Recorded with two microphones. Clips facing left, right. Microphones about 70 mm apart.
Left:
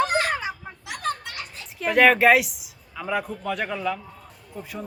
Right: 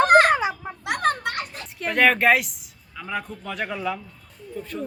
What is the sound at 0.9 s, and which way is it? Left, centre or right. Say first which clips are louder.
Children playing: right 6 dB; right.